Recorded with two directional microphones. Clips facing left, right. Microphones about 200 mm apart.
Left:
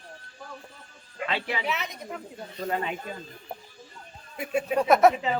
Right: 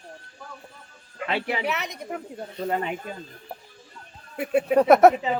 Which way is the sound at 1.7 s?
65° right (ahead or behind).